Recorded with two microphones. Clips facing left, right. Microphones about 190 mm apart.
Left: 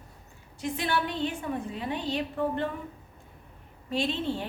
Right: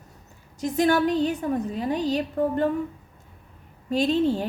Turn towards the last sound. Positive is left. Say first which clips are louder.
# right 8 dB
turn(degrees=-40)  # may be behind; listen again after turning